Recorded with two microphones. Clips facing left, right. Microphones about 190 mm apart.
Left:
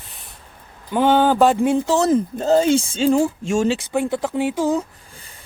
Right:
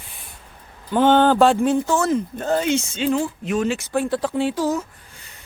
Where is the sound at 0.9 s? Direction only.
5° left (ahead or behind).